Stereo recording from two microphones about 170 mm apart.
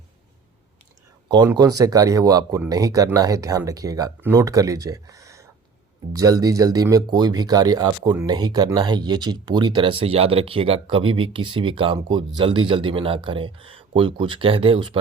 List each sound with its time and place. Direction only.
1.5 s speech: 20° right (ahead or behind)